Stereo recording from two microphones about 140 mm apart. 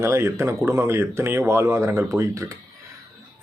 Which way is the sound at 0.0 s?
20° right (ahead or behind).